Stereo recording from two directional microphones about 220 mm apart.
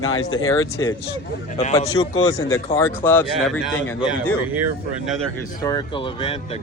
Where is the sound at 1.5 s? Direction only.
25° left (ahead or behind).